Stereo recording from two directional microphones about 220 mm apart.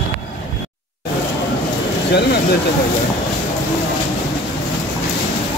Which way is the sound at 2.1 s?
45° left (ahead or behind).